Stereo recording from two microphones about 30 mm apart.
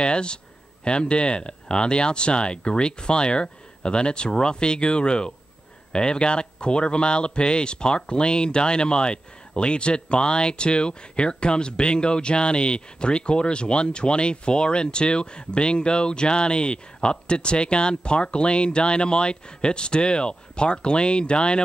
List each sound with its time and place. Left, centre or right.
0.0 s speech: left